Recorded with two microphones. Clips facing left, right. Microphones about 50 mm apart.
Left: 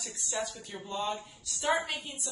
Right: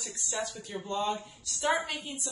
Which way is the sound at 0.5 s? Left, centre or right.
Right.